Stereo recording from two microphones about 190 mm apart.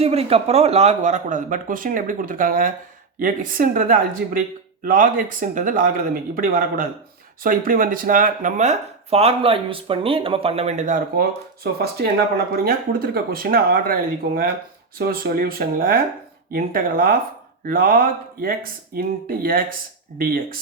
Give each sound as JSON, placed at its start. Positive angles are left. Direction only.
{"t": 0.0, "sound": "speech", "side_deg": -30}